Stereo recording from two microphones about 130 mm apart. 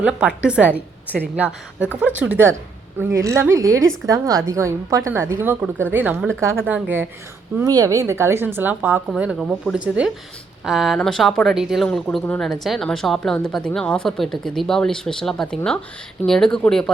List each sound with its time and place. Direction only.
0.0 s speech: 10° right (ahead or behind)
3.0 s a woman's voice: 20° right (ahead or behind)
7.6 s a woman's voice: 30° right (ahead or behind); by 16.9 s 5° left (ahead or behind)